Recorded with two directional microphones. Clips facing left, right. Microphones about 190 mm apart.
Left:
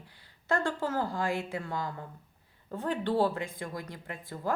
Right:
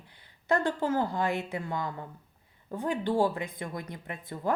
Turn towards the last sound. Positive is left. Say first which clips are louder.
# right 2 dB
turn(degrees=-20)  # may be behind; listen again after turning